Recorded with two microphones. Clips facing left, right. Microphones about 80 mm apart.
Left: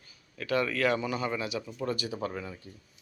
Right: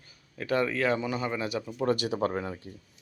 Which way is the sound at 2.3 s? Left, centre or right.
Right.